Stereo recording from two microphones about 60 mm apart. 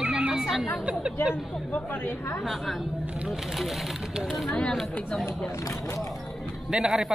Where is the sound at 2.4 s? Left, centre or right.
Centre.